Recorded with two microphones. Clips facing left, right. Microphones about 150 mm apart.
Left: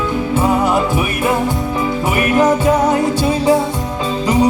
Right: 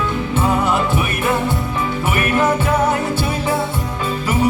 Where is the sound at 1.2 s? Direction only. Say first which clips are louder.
Left 3 dB; 15° left (ahead or behind).